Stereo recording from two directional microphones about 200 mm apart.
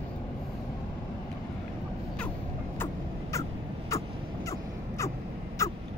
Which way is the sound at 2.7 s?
15° left (ahead or behind).